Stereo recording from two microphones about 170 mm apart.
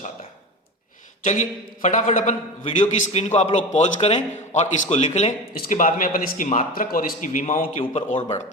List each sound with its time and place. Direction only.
1.2 s a man's voice: 45° left (ahead or behind)
5.5 s speech: 50° left (ahead or behind)
7.8 s a man's voice: 35° left (ahead or behind)